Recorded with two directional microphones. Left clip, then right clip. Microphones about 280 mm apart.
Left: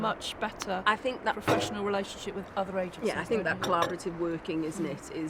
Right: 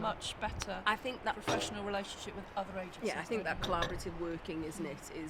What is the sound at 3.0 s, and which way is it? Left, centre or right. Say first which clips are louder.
Speech: left 6 dB; centre.